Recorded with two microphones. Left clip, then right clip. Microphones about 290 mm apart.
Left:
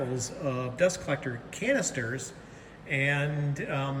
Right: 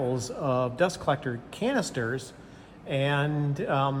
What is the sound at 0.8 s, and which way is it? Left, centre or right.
Speech, right.